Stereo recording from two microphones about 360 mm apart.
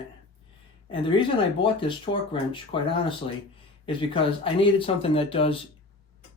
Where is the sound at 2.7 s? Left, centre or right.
Centre.